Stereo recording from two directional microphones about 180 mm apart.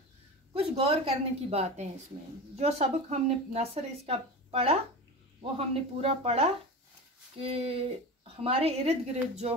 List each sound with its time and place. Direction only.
0.6 s speech: 30° right (ahead or behind)